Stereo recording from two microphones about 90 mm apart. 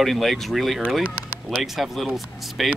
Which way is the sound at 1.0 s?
20° right (ahead or behind).